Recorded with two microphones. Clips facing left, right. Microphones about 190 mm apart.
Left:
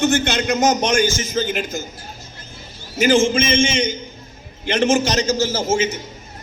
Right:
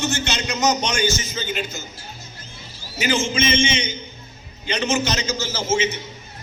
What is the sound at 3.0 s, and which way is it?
A man's voice, 50° left (ahead or behind).